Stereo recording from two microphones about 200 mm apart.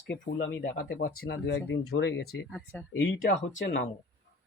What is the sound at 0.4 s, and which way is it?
Speech, 65° left (ahead or behind).